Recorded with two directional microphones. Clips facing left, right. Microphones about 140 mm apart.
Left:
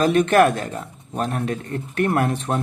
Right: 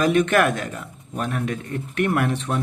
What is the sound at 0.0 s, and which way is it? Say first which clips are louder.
Speech: left 3 dB; 35° left (ahead or behind).